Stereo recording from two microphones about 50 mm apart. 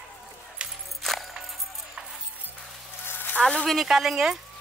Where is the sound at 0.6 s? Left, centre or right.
Right.